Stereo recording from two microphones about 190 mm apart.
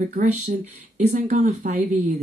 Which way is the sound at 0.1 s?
40° right (ahead or behind).